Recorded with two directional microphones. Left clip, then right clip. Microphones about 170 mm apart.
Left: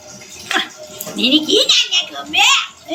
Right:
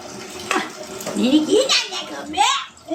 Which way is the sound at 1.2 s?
40° right (ahead or behind).